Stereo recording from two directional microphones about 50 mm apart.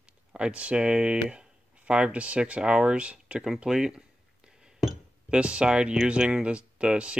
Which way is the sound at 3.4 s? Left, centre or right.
Centre.